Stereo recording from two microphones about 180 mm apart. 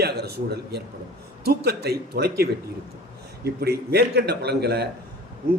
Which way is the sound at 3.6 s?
65° right (ahead or behind).